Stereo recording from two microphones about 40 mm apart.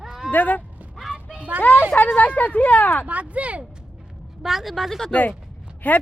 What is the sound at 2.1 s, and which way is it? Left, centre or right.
Speech, left.